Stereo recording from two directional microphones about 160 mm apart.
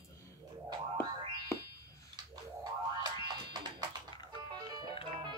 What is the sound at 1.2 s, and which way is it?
Music, 30° right (ahead or behind).